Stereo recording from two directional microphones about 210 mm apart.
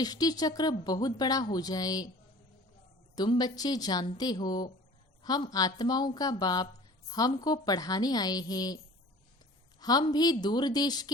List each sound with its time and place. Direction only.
0.0 s speech: 20° left (ahead or behind)
3.2 s a woman's voice: 20° left (ahead or behind)
9.8 s speech: 20° left (ahead or behind)